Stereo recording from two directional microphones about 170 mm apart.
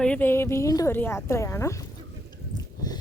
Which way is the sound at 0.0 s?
10° left (ahead or behind).